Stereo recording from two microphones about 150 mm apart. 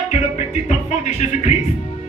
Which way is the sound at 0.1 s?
50° left (ahead or behind).